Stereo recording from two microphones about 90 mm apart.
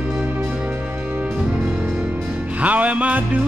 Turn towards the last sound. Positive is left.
turn(degrees=-15)  # may be behind; listen again after turning